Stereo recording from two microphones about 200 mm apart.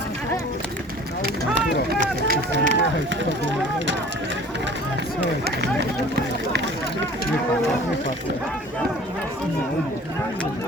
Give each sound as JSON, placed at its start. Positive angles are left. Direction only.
{"t": 1.9, "sound": "run", "side_deg": -50}